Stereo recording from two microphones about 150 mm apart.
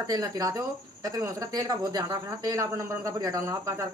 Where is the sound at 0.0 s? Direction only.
25° right (ahead or behind).